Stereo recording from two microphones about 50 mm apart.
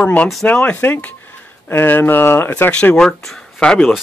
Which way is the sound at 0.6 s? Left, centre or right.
Left.